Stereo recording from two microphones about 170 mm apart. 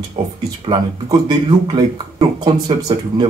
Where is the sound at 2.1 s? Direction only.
25° right (ahead or behind).